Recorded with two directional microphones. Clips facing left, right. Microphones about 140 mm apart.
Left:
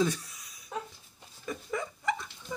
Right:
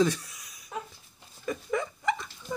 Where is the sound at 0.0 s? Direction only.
90° right.